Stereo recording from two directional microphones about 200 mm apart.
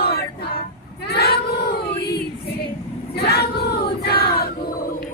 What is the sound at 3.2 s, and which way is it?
Choir, 55° left (ahead or behind).